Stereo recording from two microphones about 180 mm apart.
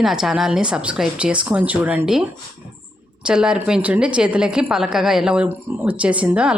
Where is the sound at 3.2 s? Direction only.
5° right (ahead or behind).